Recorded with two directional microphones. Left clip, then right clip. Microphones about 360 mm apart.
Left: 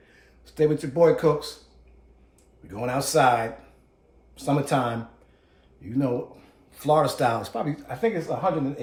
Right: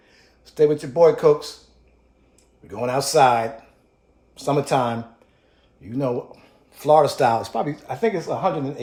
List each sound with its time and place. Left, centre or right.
0.4 s speech: centre
2.6 s speech: centre
6.7 s speech: centre